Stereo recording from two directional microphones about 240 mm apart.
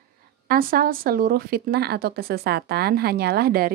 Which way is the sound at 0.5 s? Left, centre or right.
Right.